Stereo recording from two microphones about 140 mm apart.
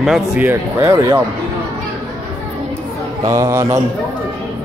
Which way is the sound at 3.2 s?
25° right (ahead or behind).